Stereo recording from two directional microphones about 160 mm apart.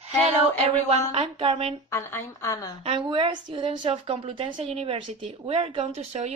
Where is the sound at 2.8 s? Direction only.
35° right (ahead or behind).